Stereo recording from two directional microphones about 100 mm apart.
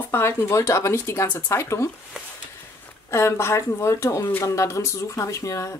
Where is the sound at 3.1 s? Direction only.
25° left (ahead or behind).